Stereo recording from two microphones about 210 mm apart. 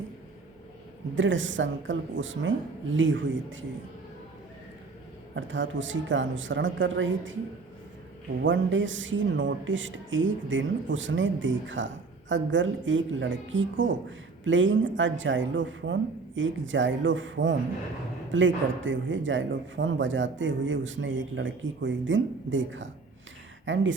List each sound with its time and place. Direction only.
1.1 s a man's voice: 65° right (ahead or behind)
5.3 s a man's voice: 65° right (ahead or behind)
8.4 s a man's voice: 65° right (ahead or behind)